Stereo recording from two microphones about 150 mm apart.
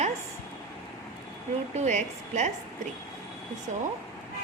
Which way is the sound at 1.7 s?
50° right (ahead or behind).